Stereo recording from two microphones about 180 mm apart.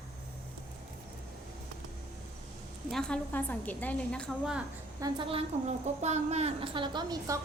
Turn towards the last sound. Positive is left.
turn(degrees=-25)  # may be behind; listen again after turning